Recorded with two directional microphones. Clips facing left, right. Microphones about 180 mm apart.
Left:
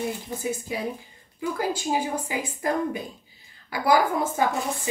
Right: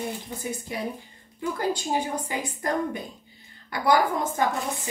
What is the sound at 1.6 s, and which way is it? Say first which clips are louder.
A woman's voice: even; 10° left (ahead or behind).